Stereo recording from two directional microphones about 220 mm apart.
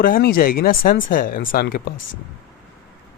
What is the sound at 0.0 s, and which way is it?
Speech, 40° left (ahead or behind).